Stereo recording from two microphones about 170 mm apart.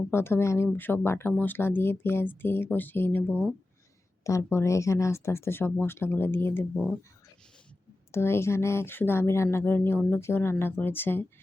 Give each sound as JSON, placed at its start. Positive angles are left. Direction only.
{"t": 0.1, "sound": "speech", "side_deg": 15}
{"t": 8.1, "sound": "speech", "side_deg": 15}